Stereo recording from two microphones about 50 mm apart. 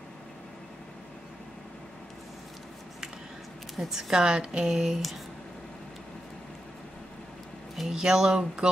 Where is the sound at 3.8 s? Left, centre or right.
Centre.